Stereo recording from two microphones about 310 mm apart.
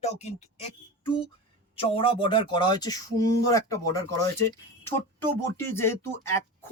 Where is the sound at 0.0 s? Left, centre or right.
Left.